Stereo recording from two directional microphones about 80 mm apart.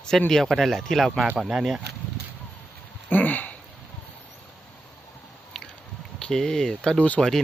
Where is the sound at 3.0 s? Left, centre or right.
Left.